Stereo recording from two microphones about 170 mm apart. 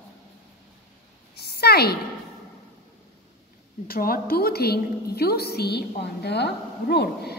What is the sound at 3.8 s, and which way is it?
A woman's voice, 60° left (ahead or behind).